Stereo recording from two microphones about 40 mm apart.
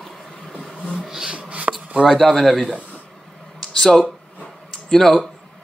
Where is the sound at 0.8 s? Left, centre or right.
Centre.